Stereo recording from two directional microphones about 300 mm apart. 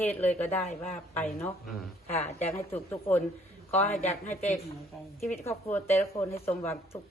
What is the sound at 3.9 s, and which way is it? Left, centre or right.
Speech, left.